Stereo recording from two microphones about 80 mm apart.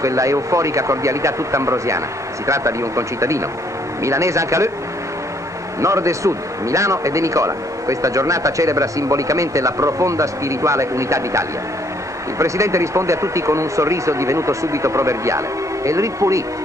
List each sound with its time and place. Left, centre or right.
0.0 s a man's voice: right
5.8 s a man's voice: right